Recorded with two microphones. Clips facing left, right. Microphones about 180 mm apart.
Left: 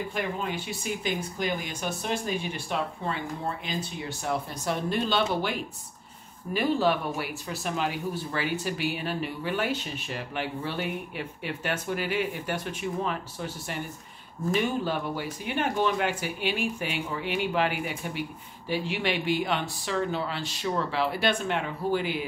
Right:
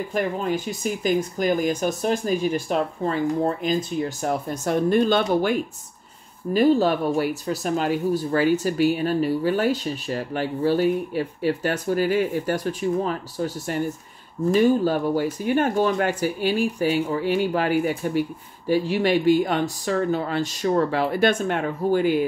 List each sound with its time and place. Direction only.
0.1 s speech: 40° right (ahead or behind)